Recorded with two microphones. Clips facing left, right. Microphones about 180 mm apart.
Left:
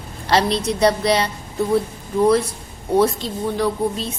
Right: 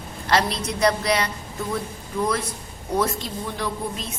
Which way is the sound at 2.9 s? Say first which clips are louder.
Left 7 dB; 30° left (ahead or behind).